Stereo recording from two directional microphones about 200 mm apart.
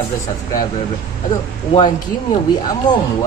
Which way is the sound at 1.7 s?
25° left (ahead or behind).